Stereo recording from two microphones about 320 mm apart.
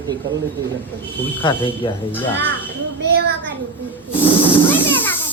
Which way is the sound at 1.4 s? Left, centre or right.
Centre.